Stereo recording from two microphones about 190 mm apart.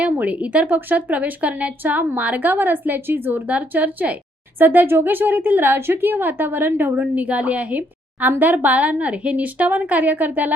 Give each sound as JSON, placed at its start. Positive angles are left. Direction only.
{"t": 0.0, "sound": "a woman's voice", "side_deg": -10}